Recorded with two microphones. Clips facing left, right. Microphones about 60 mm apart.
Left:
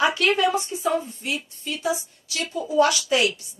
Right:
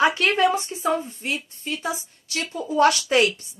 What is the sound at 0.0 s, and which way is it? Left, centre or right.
A woman's voice, right.